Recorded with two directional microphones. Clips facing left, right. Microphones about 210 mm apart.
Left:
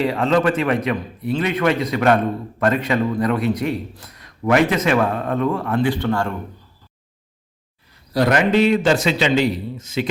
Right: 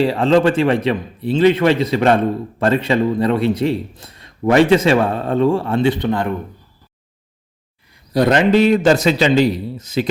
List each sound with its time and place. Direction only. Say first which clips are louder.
0.0 s a man's voice: right 4 dB; 30° right (ahead or behind)
8.1 s a man's voice: right 3 dB; 25° right (ahead or behind)
8.5 s a man's voice: right 3 dB; 40° right (ahead or behind)